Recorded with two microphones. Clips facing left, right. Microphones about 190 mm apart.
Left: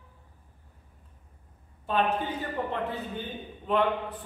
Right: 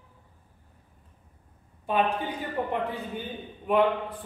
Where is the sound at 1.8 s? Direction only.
15° right (ahead or behind).